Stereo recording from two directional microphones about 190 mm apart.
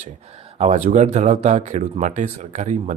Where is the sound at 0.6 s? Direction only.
35° right (ahead or behind).